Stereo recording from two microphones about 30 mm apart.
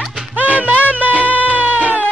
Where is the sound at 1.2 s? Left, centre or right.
Right.